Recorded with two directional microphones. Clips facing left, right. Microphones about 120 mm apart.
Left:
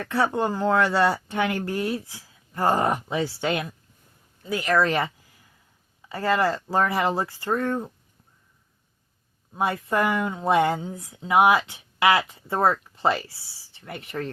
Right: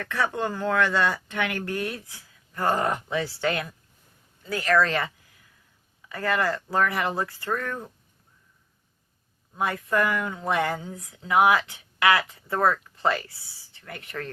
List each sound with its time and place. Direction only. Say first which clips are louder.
0.0 s speech: left 4 dB; 25° left (ahead or behind)
9.5 s speech: left 2 dB; 25° left (ahead or behind)